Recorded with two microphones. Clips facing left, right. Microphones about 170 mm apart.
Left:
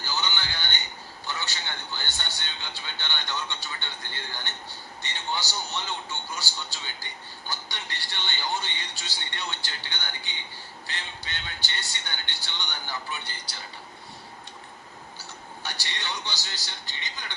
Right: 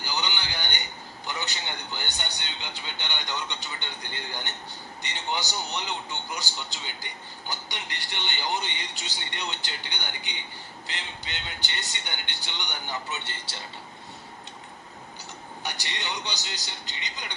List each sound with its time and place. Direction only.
0.0 s a sound: 15° right (ahead or behind)
1.3 s a man's voice: 20° right (ahead or behind)
15.2 s speech: 20° right (ahead or behind)